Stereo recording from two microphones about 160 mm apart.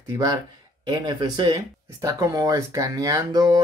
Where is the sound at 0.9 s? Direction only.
25° right (ahead or behind).